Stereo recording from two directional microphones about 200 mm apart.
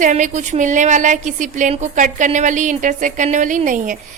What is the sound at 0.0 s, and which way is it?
Speech, 35° right (ahead or behind).